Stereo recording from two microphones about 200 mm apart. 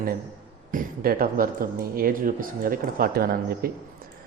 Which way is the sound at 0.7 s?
45° right (ahead or behind).